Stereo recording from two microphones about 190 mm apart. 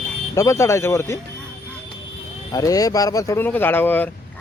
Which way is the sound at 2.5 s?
20° left (ahead or behind).